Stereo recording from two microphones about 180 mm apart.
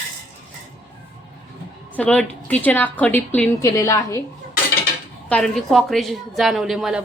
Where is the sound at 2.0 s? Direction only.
5° left (ahead or behind).